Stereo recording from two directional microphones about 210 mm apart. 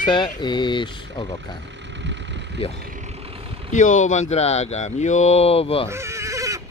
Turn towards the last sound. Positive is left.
turn(degrees=-15)  # may be behind; listen again after turning